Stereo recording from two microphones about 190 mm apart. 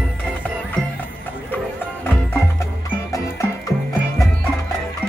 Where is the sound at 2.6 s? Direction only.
15° left (ahead or behind).